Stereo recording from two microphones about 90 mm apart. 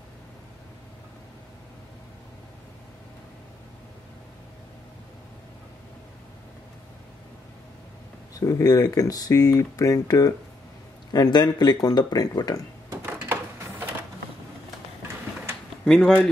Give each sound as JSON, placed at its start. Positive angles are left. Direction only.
{"t": 8.4, "sound": "speech", "side_deg": 40}
{"t": 11.1, "sound": "speech", "side_deg": 55}
{"t": 13.0, "sound": "printer", "side_deg": -30}
{"t": 15.8, "sound": "speech", "side_deg": 10}